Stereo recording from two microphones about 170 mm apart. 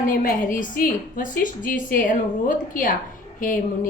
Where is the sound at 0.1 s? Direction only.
55° left (ahead or behind).